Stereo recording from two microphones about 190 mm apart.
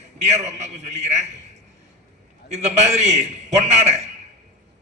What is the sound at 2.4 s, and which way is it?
A man's voice, 35° right (ahead or behind).